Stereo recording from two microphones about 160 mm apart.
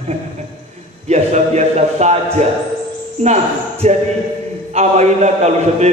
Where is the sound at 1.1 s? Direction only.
45° right (ahead or behind).